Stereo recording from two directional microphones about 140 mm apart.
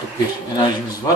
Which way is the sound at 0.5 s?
30° left (ahead or behind).